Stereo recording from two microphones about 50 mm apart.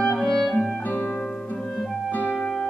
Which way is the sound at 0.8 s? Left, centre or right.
Left.